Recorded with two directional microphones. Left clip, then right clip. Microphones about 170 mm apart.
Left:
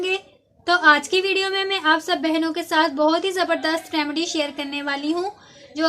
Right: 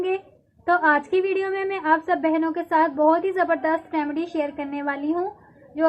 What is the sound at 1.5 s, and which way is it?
Speech, 45° left (ahead or behind).